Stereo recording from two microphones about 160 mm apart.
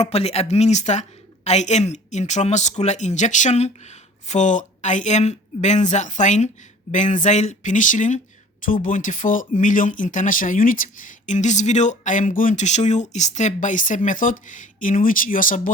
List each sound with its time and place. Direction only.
0.0 s a woman's voice: 40° left (ahead or behind); by 15.7 s 60° left (ahead or behind)